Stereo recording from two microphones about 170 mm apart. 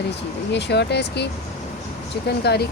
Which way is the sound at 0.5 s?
90° left.